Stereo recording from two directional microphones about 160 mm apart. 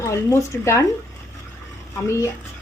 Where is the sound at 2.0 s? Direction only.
20° left (ahead or behind).